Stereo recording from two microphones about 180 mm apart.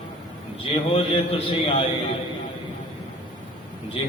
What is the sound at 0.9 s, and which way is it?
Speech, 30° left (ahead or behind).